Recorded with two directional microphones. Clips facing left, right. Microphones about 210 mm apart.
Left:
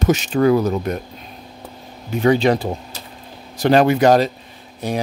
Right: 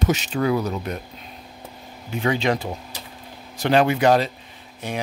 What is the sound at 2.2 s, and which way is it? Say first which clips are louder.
Speech: left 7 dB; 40° left (ahead or behind).